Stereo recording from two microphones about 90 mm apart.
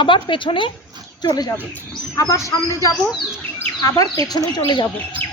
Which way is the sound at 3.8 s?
40° left (ahead or behind).